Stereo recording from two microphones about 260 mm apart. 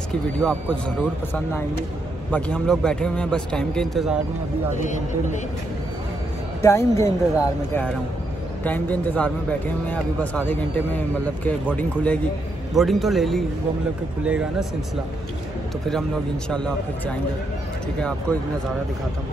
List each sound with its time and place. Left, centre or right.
0.4 s a man's voice: centre
4.7 s speech: left
6.6 s a man's voice: centre
16.4 s a man's voice: centre